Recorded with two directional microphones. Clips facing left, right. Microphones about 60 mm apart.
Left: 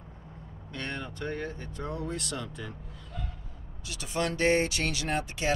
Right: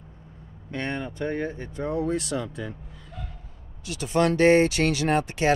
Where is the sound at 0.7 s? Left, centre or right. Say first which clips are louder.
Right 7 dB; right.